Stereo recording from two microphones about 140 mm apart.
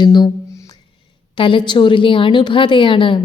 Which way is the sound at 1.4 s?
35° left (ahead or behind).